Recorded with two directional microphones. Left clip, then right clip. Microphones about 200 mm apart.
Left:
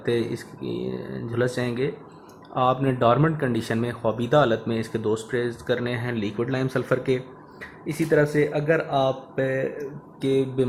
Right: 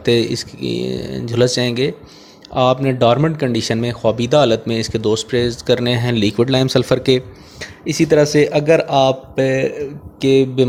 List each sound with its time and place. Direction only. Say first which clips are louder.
0.0 s speech: right 9 dB; 30° right (ahead or behind)